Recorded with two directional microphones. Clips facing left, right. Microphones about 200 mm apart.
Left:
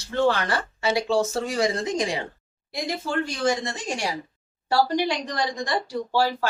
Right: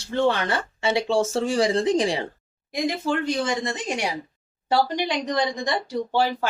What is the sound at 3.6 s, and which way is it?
Speech, 20° right (ahead or behind).